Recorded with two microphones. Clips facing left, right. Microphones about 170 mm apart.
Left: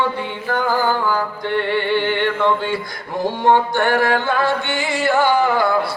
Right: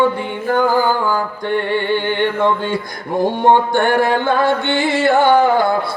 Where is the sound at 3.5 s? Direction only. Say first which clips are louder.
Right 1 dB; 55° right (ahead or behind).